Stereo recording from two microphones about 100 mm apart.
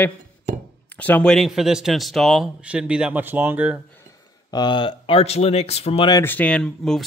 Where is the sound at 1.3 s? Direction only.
Centre (ahead or behind).